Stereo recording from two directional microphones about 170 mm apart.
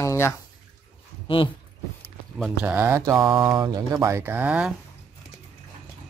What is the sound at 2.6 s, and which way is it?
Mantra, 10° right (ahead or behind).